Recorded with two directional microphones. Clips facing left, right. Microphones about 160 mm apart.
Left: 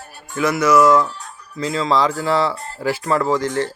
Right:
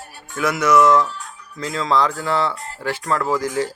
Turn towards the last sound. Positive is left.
turn(degrees=-10)  # may be behind; listen again after turning